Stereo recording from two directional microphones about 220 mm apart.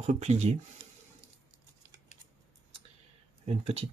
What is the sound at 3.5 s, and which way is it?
Speech, 30° right (ahead or behind).